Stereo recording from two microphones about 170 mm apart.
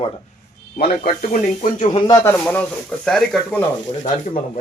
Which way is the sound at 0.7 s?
55° left (ahead or behind).